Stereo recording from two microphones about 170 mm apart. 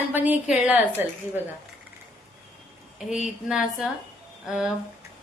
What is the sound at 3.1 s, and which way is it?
A woman's voice, 5° right (ahead or behind).